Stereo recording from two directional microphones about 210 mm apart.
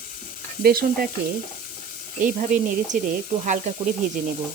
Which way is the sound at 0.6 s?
45° right (ahead or behind).